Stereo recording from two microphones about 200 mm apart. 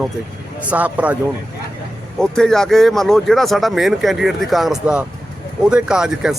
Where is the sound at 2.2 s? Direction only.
Centre (ahead or behind).